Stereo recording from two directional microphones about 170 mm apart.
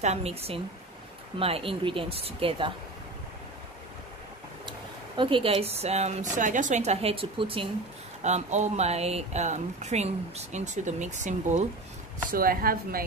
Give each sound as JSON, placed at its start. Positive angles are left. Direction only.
{"t": 0.0, "sound": "speech", "side_deg": -40}
{"t": 4.6, "sound": "speech", "side_deg": -30}
{"t": 8.2, "sound": "speech", "side_deg": -40}
{"t": 12.3, "sound": "speech", "side_deg": -60}